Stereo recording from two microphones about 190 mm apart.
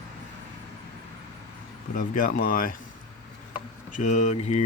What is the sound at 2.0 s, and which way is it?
Speech, 45° left (ahead or behind).